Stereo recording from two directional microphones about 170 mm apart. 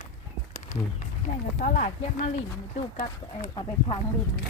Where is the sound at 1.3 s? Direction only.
50° left (ahead or behind).